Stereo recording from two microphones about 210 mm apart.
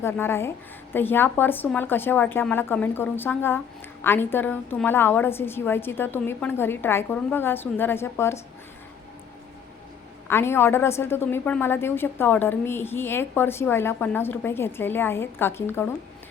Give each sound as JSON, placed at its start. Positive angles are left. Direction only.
{"t": 0.0, "sound": "a woman's voice", "side_deg": 10}
{"t": 10.2, "sound": "a woman's voice", "side_deg": 10}